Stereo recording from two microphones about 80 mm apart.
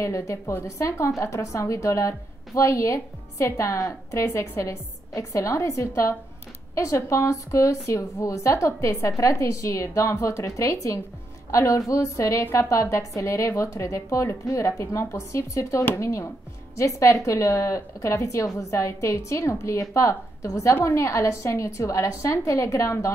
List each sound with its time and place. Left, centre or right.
0.0 s a woman's voice: left